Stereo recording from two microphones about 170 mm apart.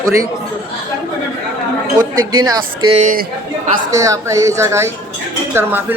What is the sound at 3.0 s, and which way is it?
Speech, 50° right (ahead or behind).